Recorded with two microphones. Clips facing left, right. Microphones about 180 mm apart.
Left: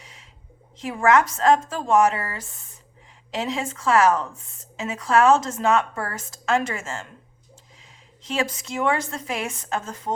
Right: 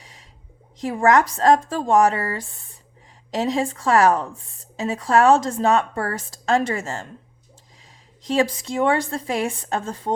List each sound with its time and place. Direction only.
0.0 s a sound: 35° right (ahead or behind)
0.8 s a woman's voice: 35° right (ahead or behind)
8.2 s a woman's voice: 35° right (ahead or behind)